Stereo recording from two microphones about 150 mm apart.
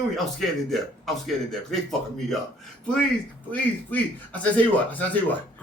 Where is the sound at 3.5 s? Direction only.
10° left (ahead or behind).